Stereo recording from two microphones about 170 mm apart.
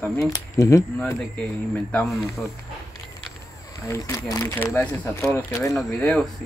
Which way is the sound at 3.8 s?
20° left (ahead or behind).